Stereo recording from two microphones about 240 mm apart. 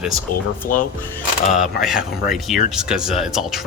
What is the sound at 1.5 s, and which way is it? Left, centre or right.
Speech, centre.